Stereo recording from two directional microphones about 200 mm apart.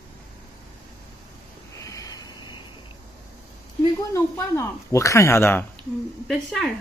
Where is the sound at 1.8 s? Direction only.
15° left (ahead or behind).